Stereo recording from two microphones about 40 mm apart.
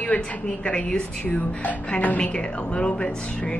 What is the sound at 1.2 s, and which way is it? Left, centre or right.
Speech, left.